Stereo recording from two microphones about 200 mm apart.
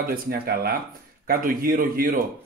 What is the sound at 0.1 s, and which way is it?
Speech, 50° right (ahead or behind).